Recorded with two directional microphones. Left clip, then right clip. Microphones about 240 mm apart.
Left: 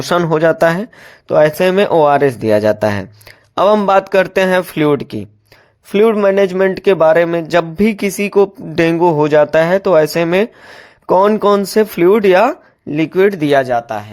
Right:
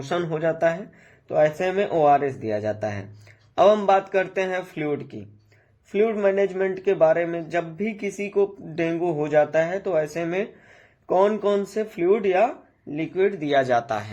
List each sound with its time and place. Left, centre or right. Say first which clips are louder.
0.1 s speech: left 12 dB; left
13.6 s speech: left 6 dB; centre